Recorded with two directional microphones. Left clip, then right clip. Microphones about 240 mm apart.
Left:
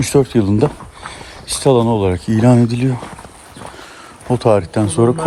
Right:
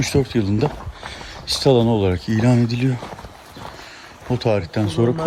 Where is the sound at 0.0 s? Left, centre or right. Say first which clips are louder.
Left 6 dB; centre.